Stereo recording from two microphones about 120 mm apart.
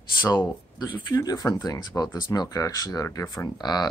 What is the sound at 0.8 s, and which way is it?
Speech, 30° left (ahead or behind).